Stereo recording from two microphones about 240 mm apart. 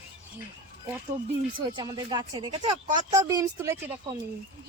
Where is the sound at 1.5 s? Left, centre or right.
Centre.